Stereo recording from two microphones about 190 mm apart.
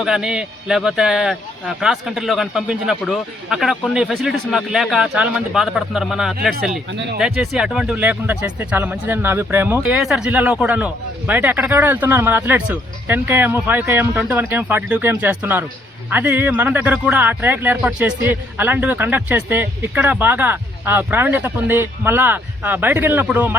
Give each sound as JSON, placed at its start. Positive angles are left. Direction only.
{"t": 0.0, "sound": "speech", "side_deg": -5}
{"t": 6.5, "sound": "speech", "side_deg": -65}
{"t": 7.2, "sound": "speech", "side_deg": -5}